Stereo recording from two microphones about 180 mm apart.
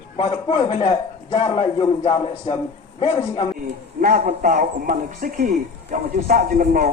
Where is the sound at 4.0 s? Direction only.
50° right (ahead or behind).